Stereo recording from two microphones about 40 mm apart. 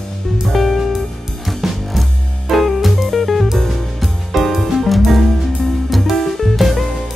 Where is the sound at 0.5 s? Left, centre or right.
Centre.